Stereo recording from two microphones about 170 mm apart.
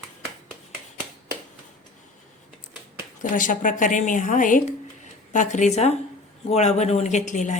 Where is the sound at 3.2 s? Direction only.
50° left (ahead or behind).